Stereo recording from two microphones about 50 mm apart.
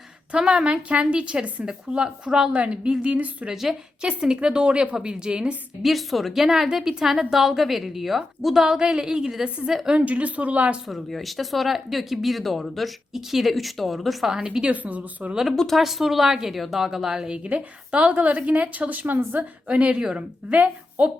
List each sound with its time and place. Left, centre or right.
0.3 s a woman's voice: centre
3.5 s a woman's voice: centre
4.0 s a woman's voice: centre
5.8 s a woman's voice: centre
9.9 s a woman's voice: right
10.8 s speech: centre
14.3 s a woman's voice: centre
14.7 s a woman's voice: right
15.4 s a woman's voice: centre; by 19.2 s right
19.4 s a woman's voice: right